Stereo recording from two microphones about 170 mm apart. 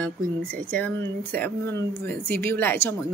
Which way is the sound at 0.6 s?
10° left (ahead or behind).